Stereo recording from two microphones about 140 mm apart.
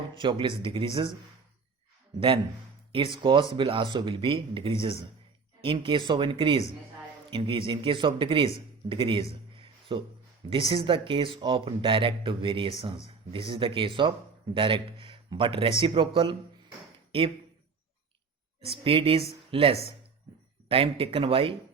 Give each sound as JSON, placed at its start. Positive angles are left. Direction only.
{"t": 0.1, "sound": "speech", "side_deg": -35}
{"t": 2.9, "sound": "speech", "side_deg": -35}
{"t": 18.6, "sound": "a woman's voice", "side_deg": -45}